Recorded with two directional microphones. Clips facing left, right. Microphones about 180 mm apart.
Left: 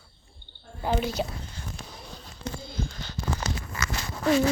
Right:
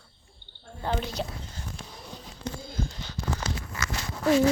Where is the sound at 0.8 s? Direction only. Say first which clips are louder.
Left 3 dB; 5° left (ahead or behind).